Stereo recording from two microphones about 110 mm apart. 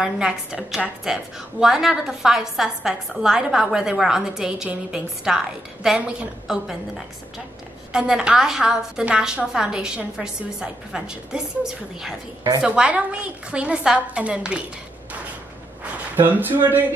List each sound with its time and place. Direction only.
0.0 s a woman's voice: 5° right (ahead or behind)
7.9 s a woman's voice: 10° right (ahead or behind)
16.2 s a woman's voice: 15° right (ahead or behind)